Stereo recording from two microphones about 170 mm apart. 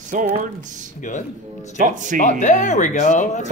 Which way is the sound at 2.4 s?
45° left (ahead or behind).